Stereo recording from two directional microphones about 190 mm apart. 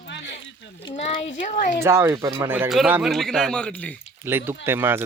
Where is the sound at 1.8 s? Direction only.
15° right (ahead or behind); by 3.9 s 5° left (ahead or behind).